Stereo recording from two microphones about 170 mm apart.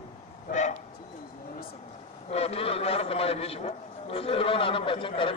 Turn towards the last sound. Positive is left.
turn(degrees=30)  # may be behind; listen again after turning